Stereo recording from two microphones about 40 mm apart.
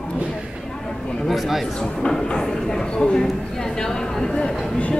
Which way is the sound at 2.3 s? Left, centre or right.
Centre.